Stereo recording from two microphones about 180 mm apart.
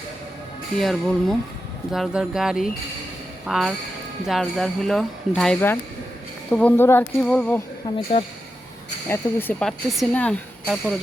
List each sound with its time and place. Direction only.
0.8 s speech: centre (ahead or behind)
7.9 s speech: 30° left (ahead or behind)
9.0 s speech: 10° left (ahead or behind)